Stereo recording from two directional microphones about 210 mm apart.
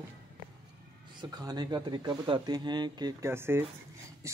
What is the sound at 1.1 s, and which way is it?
Speech, 20° right (ahead or behind).